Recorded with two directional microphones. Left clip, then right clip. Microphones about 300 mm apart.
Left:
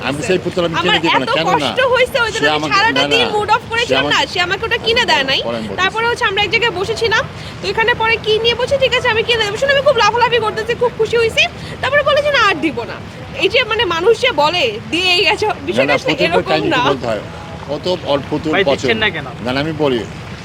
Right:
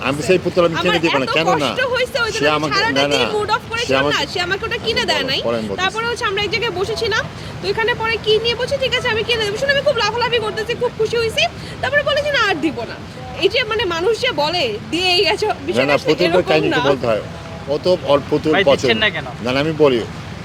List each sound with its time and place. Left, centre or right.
0.0 s speech: centre
0.7 s speech: left
2.3 s speech: centre
2.6 s speech: left
3.0 s speech: centre
3.4 s speech: left
3.8 s speech: centre
4.1 s speech: left
17.7 s speech: centre
18.9 s speech: centre
19.5 s speech: centre